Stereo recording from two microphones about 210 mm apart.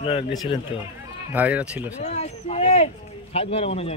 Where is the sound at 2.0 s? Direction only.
30° left (ahead or behind).